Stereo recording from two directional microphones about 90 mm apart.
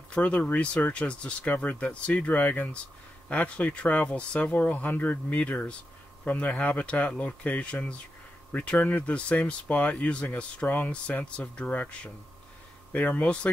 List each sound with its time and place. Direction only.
0.1 s speech: 15° left (ahead or behind)